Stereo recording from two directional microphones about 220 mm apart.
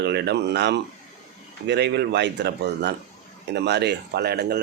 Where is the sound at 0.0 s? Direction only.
50° right (ahead or behind).